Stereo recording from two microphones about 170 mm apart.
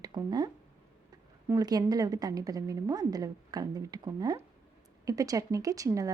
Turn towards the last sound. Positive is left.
turn(degrees=-20)  # may be behind; listen again after turning